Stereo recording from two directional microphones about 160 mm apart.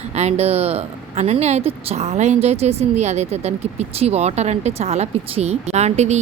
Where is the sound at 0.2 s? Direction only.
40° right (ahead or behind).